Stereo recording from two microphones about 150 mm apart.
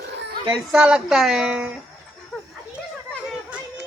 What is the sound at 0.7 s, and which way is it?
A woman's voice, 5° right (ahead or behind).